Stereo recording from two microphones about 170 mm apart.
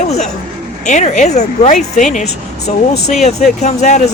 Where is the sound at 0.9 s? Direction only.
45° left (ahead or behind).